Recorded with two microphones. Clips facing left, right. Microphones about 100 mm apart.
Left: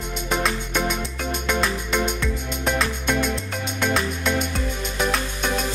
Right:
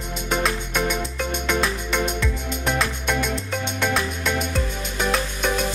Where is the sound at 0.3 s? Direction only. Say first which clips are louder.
Right 1 dB; centre (ahead or behind).